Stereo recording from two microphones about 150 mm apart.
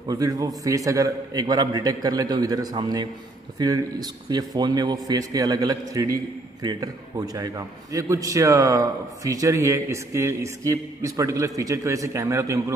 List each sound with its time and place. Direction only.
0.1 s a man's voice: 25° right (ahead or behind)